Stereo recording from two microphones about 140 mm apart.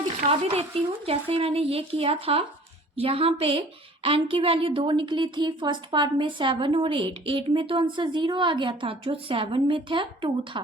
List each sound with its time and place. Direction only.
0.3 s a woman's voice: 40° right (ahead or behind)